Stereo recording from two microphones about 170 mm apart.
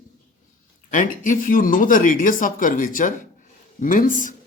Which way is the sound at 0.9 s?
50° left (ahead or behind).